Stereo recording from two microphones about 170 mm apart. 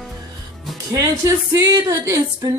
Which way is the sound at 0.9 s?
20° right (ahead or behind).